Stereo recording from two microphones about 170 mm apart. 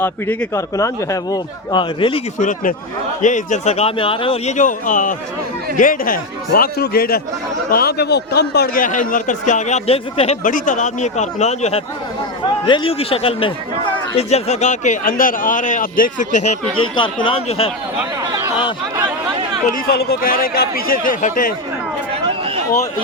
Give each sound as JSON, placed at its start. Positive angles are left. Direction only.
{"t": 0.0, "sound": "a man's voice", "side_deg": 10}
{"t": 2.4, "sound": "a man's voice", "side_deg": 50}
{"t": 10.4, "sound": "a man's voice", "side_deg": 50}
{"t": 12.6, "sound": "a man's voice", "side_deg": 30}
{"t": 16.7, "sound": "speech", "side_deg": 30}
{"t": 18.3, "sound": "a sound", "side_deg": -20}
{"t": 19.6, "sound": "speech", "side_deg": 60}